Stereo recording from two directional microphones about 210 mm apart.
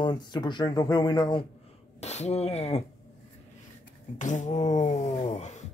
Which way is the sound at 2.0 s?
30° left (ahead or behind).